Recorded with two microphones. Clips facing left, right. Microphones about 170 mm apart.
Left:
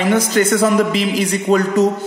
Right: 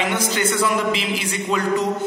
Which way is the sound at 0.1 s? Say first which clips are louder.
Left 7 dB; 40° left (ahead or behind).